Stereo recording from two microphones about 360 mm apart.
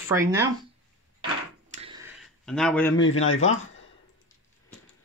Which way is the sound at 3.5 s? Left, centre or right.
Left.